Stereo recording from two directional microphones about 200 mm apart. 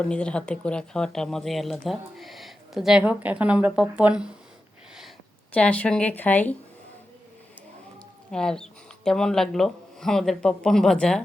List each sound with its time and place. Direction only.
0.0 s speech: 5° left (ahead or behind)
5.5 s a woman's voice: 5° left (ahead or behind)
8.3 s speech: 5° left (ahead or behind)